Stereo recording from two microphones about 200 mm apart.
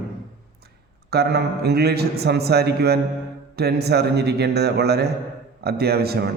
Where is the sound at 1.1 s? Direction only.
55° right (ahead or behind).